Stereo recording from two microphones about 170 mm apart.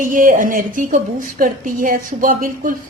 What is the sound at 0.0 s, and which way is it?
A woman's voice, 55° right (ahead or behind).